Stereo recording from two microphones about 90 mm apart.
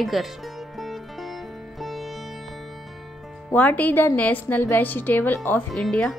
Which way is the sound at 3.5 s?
20° left (ahead or behind).